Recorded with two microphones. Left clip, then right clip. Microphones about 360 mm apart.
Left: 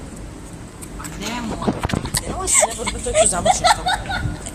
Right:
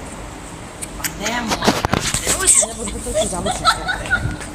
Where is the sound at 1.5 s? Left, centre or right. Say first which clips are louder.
Right 7 dB; right.